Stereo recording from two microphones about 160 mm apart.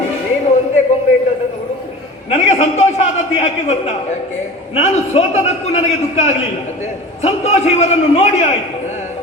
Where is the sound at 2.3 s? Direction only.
40° left (ahead or behind).